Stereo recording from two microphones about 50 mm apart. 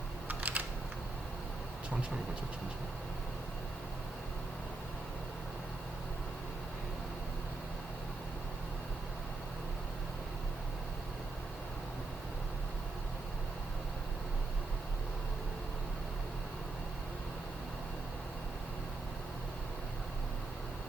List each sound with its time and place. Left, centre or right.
0.3 s typing: right